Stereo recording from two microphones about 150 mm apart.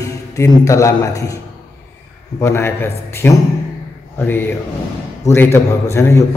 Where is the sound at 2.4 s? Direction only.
15° left (ahead or behind).